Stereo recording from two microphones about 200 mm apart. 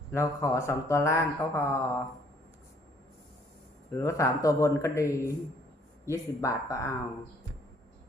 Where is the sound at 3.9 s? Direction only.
15° left (ahead or behind).